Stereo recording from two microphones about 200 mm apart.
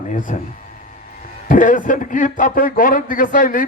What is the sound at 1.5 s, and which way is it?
A man's voice, 40° left (ahead or behind).